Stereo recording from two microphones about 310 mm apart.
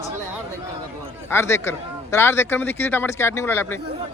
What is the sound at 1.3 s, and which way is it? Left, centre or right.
Speech, centre.